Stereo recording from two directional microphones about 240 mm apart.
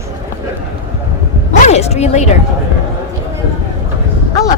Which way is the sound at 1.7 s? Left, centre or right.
Left.